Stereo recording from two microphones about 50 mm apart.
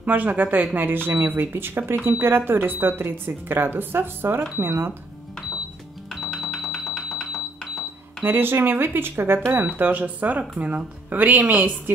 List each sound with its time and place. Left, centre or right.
0.0 s speech: right
6.3 s a sound: centre
8.2 s speech: right
9.8 s speech: right